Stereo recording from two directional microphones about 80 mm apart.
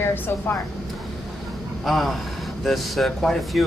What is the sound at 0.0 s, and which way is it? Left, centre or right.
Speech, left.